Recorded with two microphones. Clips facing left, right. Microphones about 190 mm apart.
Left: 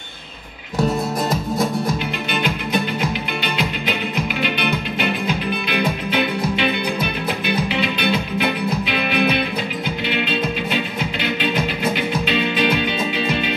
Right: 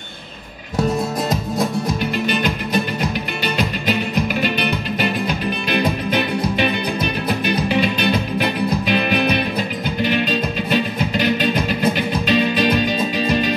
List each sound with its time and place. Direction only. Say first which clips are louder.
8.0 s music: right 1 dB; 45° right (ahead or behind)
10.2 s music: right 1 dB; 40° right (ahead or behind)